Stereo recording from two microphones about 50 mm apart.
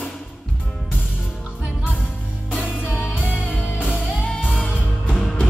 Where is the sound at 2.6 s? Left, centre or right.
Left.